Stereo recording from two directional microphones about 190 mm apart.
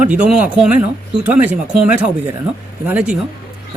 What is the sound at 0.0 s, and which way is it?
Speech, 5° right (ahead or behind).